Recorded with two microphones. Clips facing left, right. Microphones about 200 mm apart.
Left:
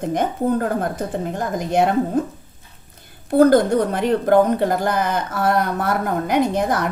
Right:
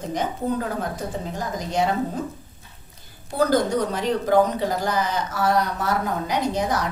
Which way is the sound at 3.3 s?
55° left (ahead or behind).